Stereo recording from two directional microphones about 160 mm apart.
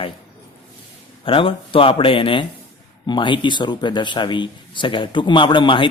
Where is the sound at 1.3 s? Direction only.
35° left (ahead or behind).